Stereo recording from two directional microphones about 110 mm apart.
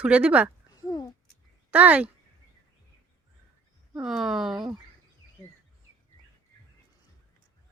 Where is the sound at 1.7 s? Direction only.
15° right (ahead or behind).